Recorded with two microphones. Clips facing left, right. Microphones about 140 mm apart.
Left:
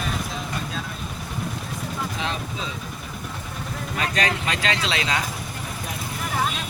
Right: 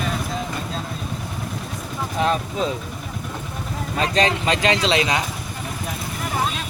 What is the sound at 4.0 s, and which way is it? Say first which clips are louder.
Speech: right 5 dB; 30° right (ahead or behind).